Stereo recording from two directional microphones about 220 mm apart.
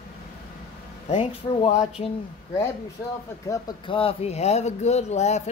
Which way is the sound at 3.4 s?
20° left (ahead or behind).